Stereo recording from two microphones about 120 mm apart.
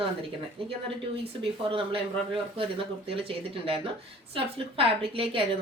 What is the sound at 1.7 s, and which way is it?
Speech, 50° right (ahead or behind).